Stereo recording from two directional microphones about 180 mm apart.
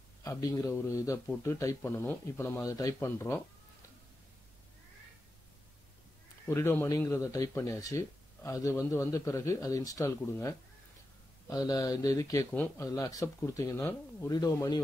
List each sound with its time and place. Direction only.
0.2 s speech: 20° left (ahead or behind)
6.4 s speech: 15° left (ahead or behind)